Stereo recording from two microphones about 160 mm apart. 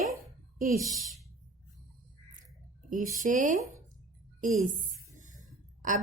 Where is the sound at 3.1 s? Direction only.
55° right (ahead or behind).